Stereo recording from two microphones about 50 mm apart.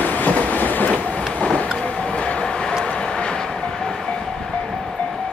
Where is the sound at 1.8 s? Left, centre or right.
Left.